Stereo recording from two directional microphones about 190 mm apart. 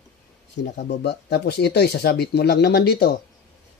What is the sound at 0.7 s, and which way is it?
Speech, 60° left (ahead or behind).